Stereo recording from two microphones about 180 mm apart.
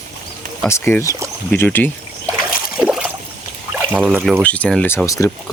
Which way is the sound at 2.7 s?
5° right (ahead or behind).